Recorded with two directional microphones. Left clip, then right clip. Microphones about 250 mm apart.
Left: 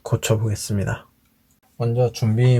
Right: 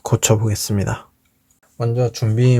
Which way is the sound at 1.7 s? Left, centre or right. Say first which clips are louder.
Right 1 dB; right.